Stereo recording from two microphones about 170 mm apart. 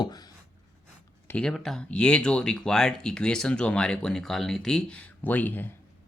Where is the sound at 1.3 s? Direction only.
5° left (ahead or behind).